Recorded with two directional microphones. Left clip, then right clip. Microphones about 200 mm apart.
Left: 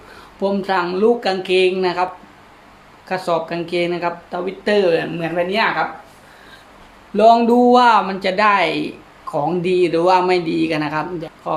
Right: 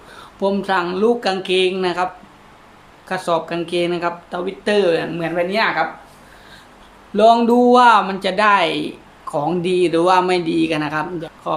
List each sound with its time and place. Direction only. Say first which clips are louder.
0.3 s speech: even; centre (ahead or behind)
3.1 s speech: even; 5° right (ahead or behind)
7.2 s speech: left 1 dB; 5° right (ahead or behind)